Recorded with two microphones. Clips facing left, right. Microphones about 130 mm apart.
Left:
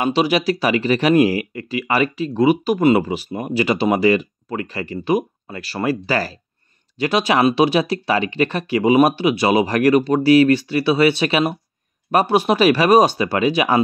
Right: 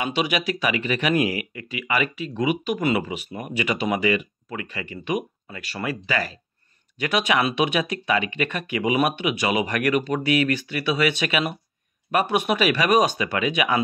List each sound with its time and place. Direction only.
0.0 s speech: 35° left (ahead or behind)